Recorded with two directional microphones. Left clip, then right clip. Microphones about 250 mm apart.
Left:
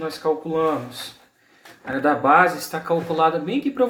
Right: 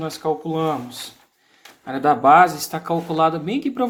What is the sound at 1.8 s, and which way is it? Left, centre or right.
Speech, right.